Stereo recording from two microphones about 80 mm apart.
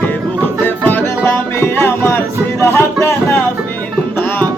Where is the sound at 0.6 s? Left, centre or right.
Left.